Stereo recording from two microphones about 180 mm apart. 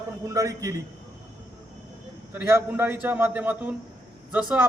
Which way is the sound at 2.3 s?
10° right (ahead or behind).